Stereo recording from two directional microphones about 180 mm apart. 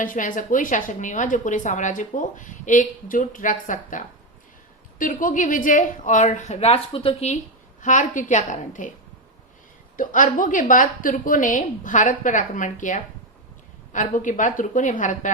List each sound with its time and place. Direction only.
0.0 s a woman's voice: 50° left (ahead or behind)
7.8 s a woman's voice: 45° left (ahead or behind)
10.0 s a woman's voice: 50° left (ahead or behind)